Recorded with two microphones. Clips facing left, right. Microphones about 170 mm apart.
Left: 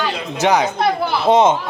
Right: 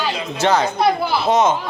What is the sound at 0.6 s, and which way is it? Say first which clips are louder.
Speech: right 1 dB; centre (ahead or behind).